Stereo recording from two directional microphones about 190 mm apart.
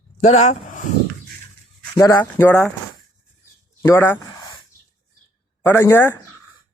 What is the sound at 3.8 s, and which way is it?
Speech, 15° left (ahead or behind).